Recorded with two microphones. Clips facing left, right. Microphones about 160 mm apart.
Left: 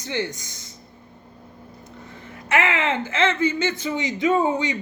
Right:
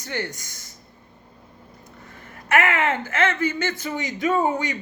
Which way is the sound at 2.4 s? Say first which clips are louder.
Right 1 dB; 20° left (ahead or behind).